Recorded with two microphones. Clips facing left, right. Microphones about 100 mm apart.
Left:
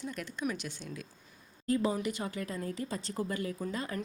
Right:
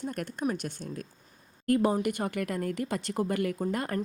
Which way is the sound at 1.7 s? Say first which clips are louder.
Right 5 dB; 60° right (ahead or behind).